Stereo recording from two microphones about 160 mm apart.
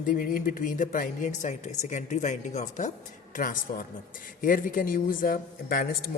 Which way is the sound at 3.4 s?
60° left (ahead or behind).